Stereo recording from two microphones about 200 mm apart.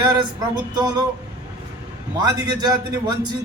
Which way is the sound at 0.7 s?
20° right (ahead or behind).